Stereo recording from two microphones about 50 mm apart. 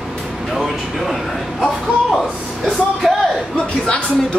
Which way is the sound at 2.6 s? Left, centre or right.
Centre.